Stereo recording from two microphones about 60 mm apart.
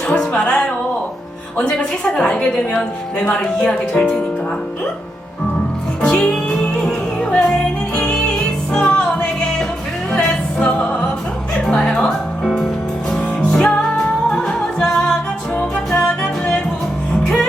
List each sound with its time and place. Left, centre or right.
0.1 s music: centre
2.0 s speech: centre
3.6 s speech: centre
6.1 s music: centre